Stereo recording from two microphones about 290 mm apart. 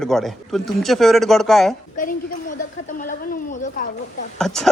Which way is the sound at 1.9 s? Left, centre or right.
Left.